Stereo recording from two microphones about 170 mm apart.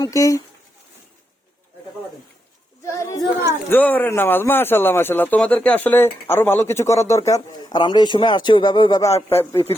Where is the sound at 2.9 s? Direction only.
15° left (ahead or behind).